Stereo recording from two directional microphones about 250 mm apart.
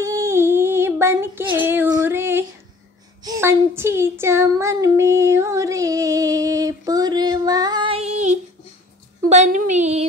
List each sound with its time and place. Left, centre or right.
0.0 s female singing: centre
3.3 s a sound: centre; by 8.4 s right
9.3 s a woman's voice: right